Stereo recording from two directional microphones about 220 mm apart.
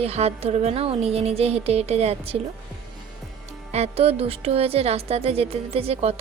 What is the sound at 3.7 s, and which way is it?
Speech, 30° right (ahead or behind).